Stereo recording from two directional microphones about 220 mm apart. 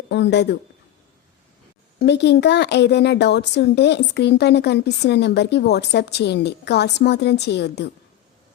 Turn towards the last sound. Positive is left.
turn(degrees=50)  # may be behind; listen again after turning